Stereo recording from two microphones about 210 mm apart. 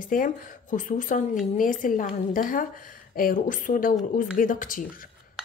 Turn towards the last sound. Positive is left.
turn(degrees=40)  # may be behind; listen again after turning